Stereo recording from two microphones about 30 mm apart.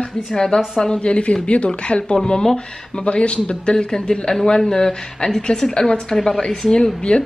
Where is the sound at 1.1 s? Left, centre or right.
Left.